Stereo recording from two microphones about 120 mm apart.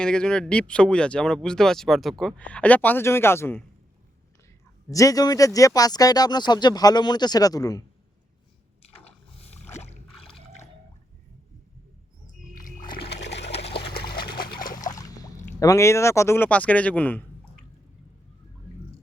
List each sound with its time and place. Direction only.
0.0 s speech: 5° left (ahead or behind)
4.9 s speech: 30° left (ahead or behind)
9.4 s rowboat: 65° left (ahead or behind)
13.7 s water: 50° left (ahead or behind)
15.6 s speech: 25° left (ahead or behind)